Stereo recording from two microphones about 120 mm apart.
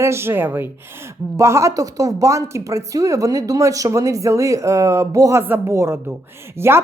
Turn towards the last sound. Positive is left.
turn(degrees=-20)  # may be behind; listen again after turning